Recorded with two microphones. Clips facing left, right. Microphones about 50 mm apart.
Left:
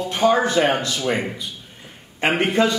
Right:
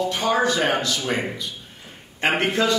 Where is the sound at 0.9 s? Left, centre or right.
Centre.